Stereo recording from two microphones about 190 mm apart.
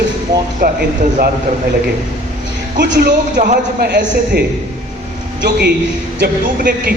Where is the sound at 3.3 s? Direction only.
45° right (ahead or behind).